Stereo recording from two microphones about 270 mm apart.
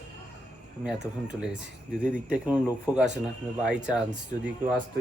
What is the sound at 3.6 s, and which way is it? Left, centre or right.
Speech, centre.